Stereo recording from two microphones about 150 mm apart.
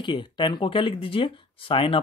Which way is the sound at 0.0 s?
30° left (ahead or behind).